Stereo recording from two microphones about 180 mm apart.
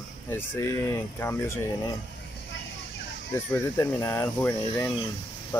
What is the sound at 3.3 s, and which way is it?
Speech, 15° left (ahead or behind).